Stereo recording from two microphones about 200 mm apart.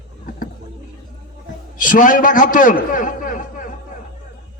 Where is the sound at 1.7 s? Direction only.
40° left (ahead or behind).